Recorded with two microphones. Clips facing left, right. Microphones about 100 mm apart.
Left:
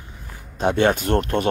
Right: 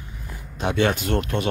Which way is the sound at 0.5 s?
45° left (ahead or behind).